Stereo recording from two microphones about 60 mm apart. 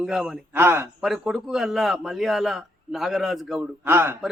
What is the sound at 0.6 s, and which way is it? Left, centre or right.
Speech, right.